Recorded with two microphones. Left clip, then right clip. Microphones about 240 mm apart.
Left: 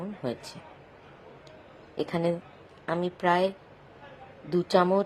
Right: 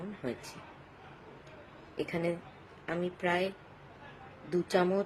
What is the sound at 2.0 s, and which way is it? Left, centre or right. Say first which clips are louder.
A woman's voice: left 6 dB; centre.